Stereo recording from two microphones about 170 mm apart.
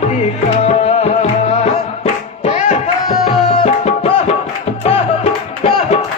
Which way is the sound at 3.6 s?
40° left (ahead or behind).